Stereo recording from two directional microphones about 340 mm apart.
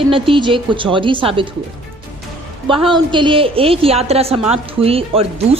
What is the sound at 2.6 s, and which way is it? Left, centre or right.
A woman's voice, centre.